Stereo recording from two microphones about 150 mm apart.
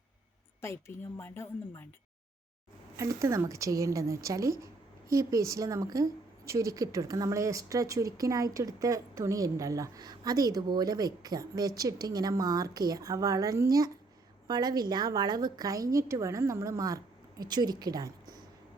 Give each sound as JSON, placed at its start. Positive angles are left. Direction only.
{"t": 0.6, "sound": "a woman's voice", "side_deg": 15}
{"t": 2.9, "sound": "a woman's voice", "side_deg": -20}